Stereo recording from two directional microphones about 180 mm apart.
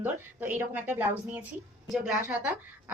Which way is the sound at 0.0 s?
10° right (ahead or behind).